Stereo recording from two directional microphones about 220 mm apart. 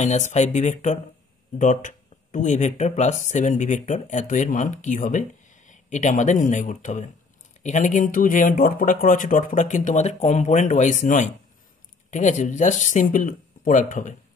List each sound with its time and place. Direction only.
0.0 s speech: 30° left (ahead or behind)